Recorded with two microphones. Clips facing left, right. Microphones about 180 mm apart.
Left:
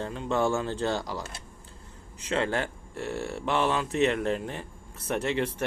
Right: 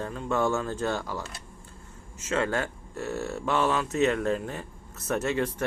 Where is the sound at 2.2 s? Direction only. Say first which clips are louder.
Even; 30° left (ahead or behind).